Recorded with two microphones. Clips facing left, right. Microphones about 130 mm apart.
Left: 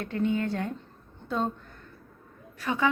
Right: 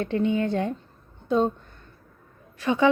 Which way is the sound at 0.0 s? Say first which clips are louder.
Right 4 dB; 20° right (ahead or behind).